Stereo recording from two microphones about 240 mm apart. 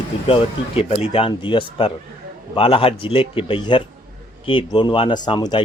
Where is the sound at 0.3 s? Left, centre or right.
Left.